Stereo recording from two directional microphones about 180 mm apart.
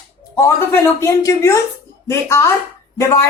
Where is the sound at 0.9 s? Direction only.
15° left (ahead or behind).